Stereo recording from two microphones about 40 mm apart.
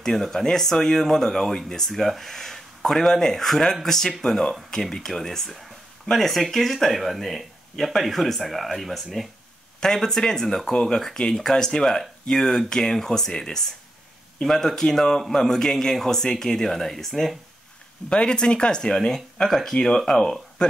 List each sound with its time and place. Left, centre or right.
0.0 s a man's voice: centre
9.9 s a man's voice: centre
18.1 s a man's voice: left